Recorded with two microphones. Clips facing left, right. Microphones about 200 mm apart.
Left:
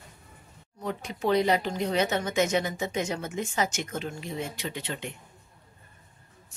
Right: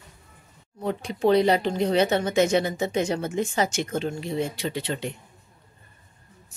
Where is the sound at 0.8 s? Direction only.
30° right (ahead or behind).